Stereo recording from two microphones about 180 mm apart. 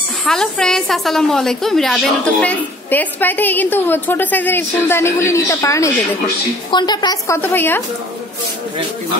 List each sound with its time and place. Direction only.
0.2 s a woman's voice: 5° left (ahead or behind)